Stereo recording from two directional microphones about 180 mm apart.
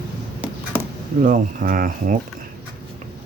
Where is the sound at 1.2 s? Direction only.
45° right (ahead or behind).